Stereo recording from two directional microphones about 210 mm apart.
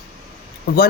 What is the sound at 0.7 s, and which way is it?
Speech, 45° left (ahead or behind).